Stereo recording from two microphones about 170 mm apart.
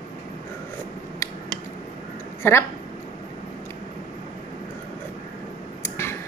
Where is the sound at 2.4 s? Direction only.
15° left (ahead or behind).